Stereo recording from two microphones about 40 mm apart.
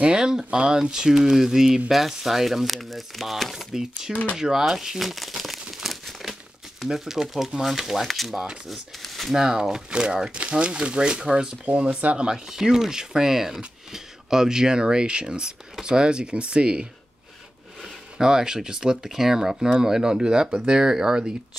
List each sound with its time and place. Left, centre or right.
0.0 s speech: centre
3.5 s speech: centre
4.1 s speech: left
4.4 s crumpling: centre
6.8 s speech: centre
9.3 s speech: centre
11.7 s speech: right
12.3 s speech: centre
18.1 s speech: centre